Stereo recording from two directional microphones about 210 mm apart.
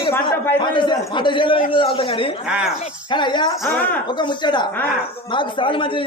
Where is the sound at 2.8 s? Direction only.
20° left (ahead or behind).